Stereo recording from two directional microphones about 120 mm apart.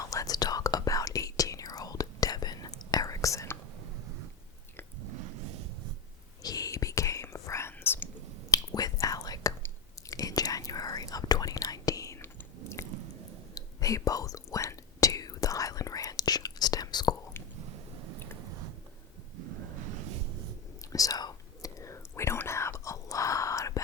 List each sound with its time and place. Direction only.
0.0 s whispering: 25° left (ahead or behind)
6.4 s whispering: 30° left (ahead or behind)
8.4 s whispering: 30° left (ahead or behind)
20.9 s whispering: 30° left (ahead or behind)